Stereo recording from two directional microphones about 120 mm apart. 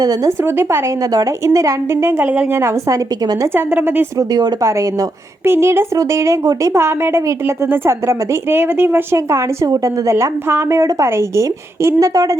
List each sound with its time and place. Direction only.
0.0 s speech: 30° right (ahead or behind)
0.4 s a woman's voice: 20° right (ahead or behind)
4.2 s a woman's voice: 30° right (ahead or behind)